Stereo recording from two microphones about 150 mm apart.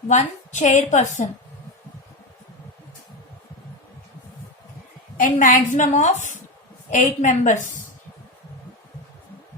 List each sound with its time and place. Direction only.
0.1 s a woman's voice: 55° left (ahead or behind)
5.2 s a woman's voice: 60° left (ahead or behind)